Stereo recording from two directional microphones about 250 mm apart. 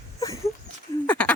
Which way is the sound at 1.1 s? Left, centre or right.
Centre.